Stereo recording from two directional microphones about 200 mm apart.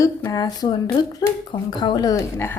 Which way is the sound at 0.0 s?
15° left (ahead or behind).